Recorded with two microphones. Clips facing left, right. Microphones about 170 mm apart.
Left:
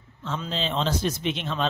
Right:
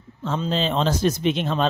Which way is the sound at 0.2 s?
40° right (ahead or behind).